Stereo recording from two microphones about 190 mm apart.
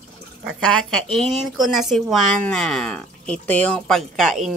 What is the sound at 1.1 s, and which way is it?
Speech, centre (ahead or behind).